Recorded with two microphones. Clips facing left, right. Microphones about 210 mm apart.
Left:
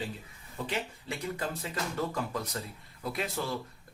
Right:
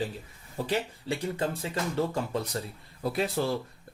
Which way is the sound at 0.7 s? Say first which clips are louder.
Right 6 dB; 30° right (ahead or behind).